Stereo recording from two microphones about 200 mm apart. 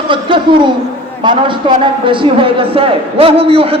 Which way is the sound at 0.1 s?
25° right (ahead or behind).